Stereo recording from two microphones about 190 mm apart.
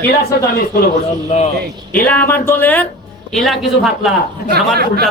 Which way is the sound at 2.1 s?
10° left (ahead or behind).